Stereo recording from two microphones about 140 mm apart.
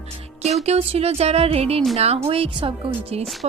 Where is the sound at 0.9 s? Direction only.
45° right (ahead or behind).